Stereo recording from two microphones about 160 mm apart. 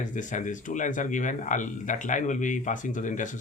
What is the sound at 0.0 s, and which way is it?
Speech, 50° left (ahead or behind).